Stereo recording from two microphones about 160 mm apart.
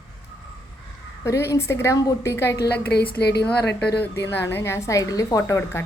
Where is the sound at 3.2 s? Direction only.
90° left.